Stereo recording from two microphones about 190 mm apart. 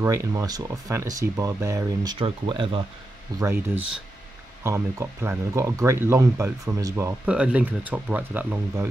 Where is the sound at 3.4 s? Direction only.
10° right (ahead or behind).